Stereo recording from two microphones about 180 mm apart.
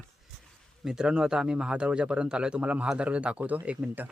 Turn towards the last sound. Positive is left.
turn(degrees=-5)  # may be behind; listen again after turning